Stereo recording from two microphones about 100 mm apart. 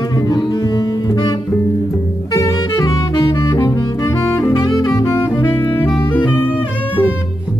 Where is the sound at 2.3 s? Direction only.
30° left (ahead or behind).